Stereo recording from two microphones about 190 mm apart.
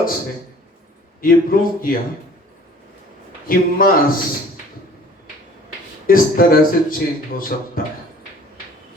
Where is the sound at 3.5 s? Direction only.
50° left (ahead or behind).